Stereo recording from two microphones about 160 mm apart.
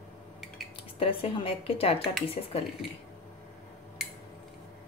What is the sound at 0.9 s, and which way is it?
A woman's voice, 35° left (ahead or behind).